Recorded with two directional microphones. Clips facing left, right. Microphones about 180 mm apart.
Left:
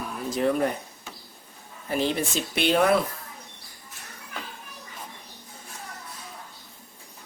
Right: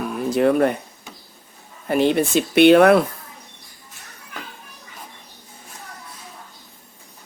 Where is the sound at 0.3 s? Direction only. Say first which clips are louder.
Right 7 dB; 65° right (ahead or behind).